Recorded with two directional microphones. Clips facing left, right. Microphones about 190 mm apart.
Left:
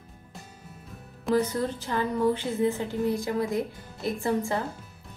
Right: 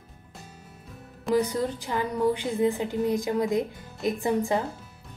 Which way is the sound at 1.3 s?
15° right (ahead or behind).